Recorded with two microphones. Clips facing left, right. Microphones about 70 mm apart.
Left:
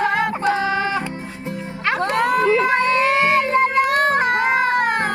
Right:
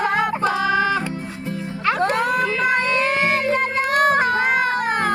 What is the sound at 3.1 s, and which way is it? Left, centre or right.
Cat, left.